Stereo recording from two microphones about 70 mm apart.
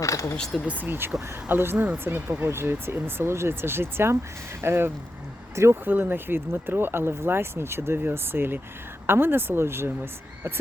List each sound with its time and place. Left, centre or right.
0.0 s speech: left
0.6 s speech: right